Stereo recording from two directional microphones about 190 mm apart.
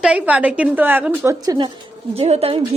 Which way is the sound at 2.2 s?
30° right (ahead or behind).